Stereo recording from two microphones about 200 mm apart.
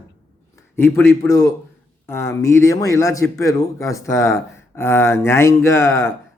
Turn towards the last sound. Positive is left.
turn(degrees=15)  # may be behind; listen again after turning